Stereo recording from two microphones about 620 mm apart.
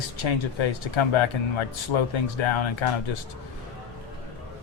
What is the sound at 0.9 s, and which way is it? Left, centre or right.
Speech, left.